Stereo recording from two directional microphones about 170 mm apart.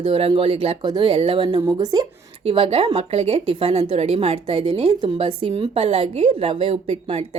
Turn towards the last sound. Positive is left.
turn(degrees=-35)  # may be behind; listen again after turning